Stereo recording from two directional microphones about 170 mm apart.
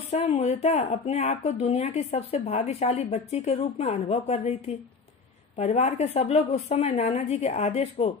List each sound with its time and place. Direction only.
0.1 s speech: 40° left (ahead or behind)
5.6 s speech: 40° left (ahead or behind)